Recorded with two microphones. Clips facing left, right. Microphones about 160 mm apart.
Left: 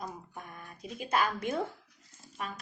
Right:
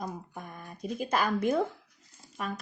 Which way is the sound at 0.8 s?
40° right (ahead or behind).